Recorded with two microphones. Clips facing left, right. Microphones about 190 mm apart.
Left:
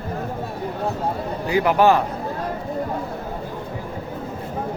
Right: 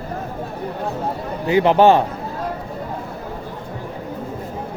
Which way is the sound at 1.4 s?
25° right (ahead or behind).